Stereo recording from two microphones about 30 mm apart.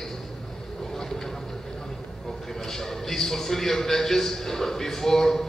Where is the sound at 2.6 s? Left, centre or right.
Centre.